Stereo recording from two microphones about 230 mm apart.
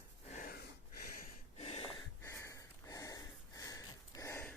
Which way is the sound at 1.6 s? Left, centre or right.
Left.